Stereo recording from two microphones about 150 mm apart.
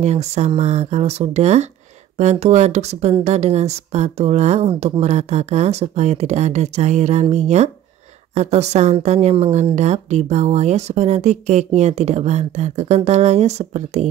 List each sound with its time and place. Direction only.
0.0 s a woman's voice: 45° right (ahead or behind)